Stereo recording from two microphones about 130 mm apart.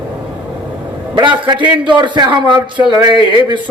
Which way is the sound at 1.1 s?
35° right (ahead or behind).